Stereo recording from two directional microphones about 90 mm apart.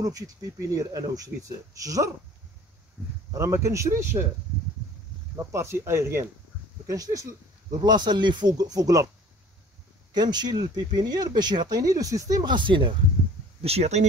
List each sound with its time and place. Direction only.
0.0 s speech: 40° right (ahead or behind)
3.0 s speech: 20° right (ahead or behind)
3.3 s speech: 30° right (ahead or behind)
5.4 s speech: 30° right (ahead or behind)
6.9 s speech: 40° right (ahead or behind)
7.7 s speech: 55° right (ahead or behind)
10.1 s speech: 50° right (ahead or behind)
12.5 s speech: 65° right (ahead or behind)
13.7 s speech: 90° right